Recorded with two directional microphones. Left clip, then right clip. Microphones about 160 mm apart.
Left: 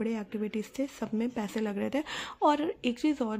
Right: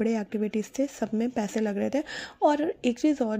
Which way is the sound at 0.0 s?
20° right (ahead or behind).